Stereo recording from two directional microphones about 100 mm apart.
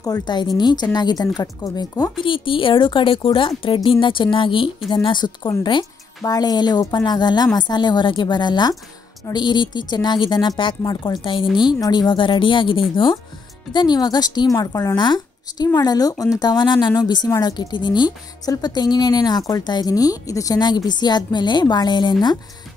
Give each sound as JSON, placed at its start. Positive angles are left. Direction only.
{"t": 0.0, "sound": "a woman's voice", "side_deg": 45}
{"t": 2.2, "sound": "a woman's voice", "side_deg": 60}
{"t": 10.8, "sound": "a woman's voice", "side_deg": 40}
{"t": 13.7, "sound": "a woman's voice", "side_deg": 45}